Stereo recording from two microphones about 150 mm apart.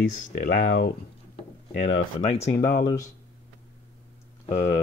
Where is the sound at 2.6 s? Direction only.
70° left (ahead or behind).